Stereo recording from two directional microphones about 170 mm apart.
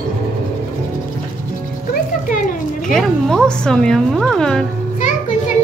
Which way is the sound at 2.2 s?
50° left (ahead or behind).